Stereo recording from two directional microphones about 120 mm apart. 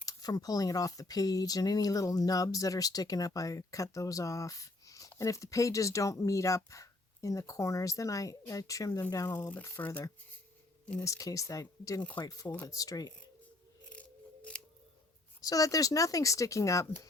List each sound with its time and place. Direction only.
0.0 s speech: 30° left (ahead or behind)
9.4 s speech: 15° left (ahead or behind)
11.0 s speech: 30° left (ahead or behind)
13.9 s scissors: 10° left (ahead or behind)
15.4 s speech: 30° left (ahead or behind)